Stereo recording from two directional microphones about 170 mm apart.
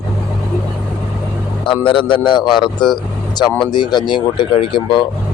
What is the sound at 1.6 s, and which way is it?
Speech, 30° left (ahead or behind).